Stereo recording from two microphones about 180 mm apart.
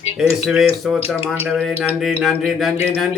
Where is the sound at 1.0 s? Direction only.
30° left (ahead or behind).